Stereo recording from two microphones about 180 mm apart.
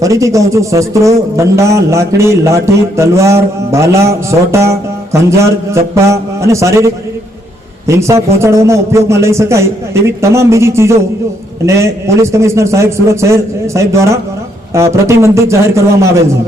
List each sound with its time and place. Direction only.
0.0 s a man's voice: 20° right (ahead or behind)